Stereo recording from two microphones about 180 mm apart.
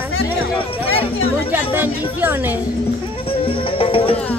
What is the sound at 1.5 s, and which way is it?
A man's voice, 10° right (ahead or behind).